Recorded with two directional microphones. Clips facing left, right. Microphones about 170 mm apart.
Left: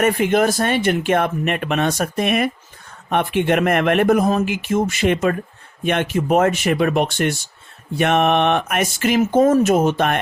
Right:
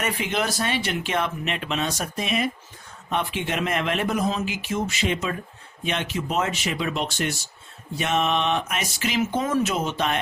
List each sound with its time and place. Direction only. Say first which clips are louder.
0.0 s speech: left 10 dB; 50° left (ahead or behind)